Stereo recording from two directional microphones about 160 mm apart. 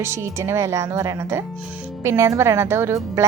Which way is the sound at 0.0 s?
15° right (ahead or behind).